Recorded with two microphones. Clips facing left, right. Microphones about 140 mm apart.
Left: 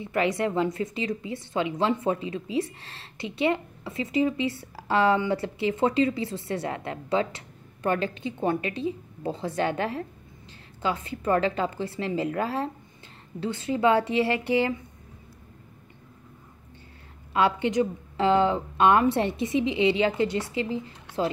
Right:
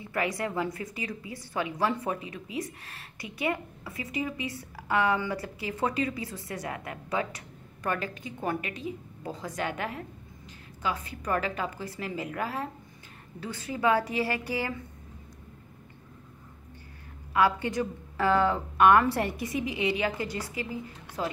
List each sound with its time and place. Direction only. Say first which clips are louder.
0.0 s a woman's voice: left 5 dB; 25° left (ahead or behind)
17.3 s a woman's voice: left 2 dB; 25° left (ahead or behind)